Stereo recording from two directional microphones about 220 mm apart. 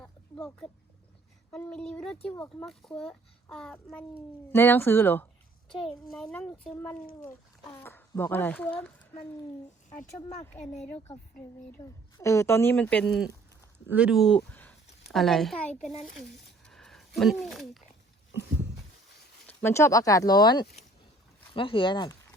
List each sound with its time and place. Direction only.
0.0 s a sound: 5° left (ahead or behind)
1.5 s a child's voice: 10° left (ahead or behind)
9.9 s speech: 35° left (ahead or behind)
10.4 s a woman's voice: 10° left (ahead or behind)
10.8 s speech: 30° left (ahead or behind)
11.3 s a woman's voice: 10° left (ahead or behind)
16.5 s a sound: centre (ahead or behind)
19.5 s a woman's voice: 10° left (ahead or behind)